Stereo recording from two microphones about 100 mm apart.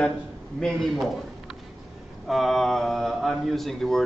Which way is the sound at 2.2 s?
Centre (ahead or behind).